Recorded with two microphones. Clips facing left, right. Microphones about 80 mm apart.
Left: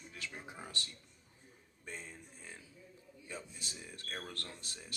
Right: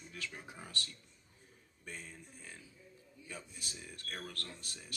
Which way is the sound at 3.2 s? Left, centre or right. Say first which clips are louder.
Left 2 dB; left.